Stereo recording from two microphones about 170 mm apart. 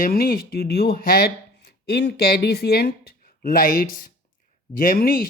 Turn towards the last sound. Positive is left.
turn(degrees=60)  # may be behind; listen again after turning